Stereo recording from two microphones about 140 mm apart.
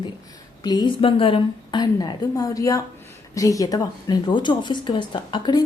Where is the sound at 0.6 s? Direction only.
30° left (ahead or behind).